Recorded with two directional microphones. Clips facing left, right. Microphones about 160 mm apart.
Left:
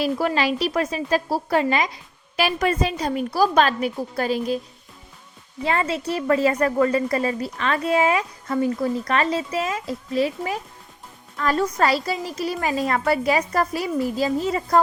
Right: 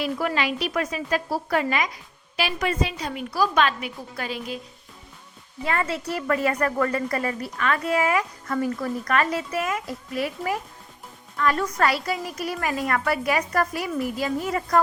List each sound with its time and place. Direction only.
0.0 s a woman's voice: 35° left (ahead or behind)
2.3 s a woman's voice: 45° left (ahead or behind)
5.6 s a woman's voice: 25° left (ahead or behind)